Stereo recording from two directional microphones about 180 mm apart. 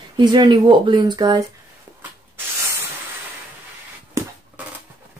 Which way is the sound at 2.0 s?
10° right (ahead or behind).